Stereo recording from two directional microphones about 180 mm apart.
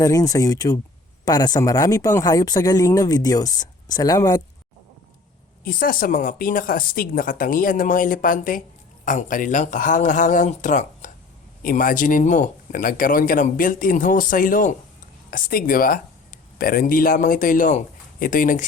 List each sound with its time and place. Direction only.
0.0 s speech: 20° left (ahead or behind)
5.6 s speech: 50° left (ahead or behind)